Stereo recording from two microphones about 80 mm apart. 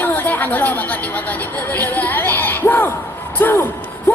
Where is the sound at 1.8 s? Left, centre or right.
Left.